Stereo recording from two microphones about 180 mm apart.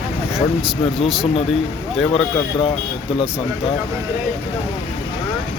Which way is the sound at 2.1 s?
30° left (ahead or behind).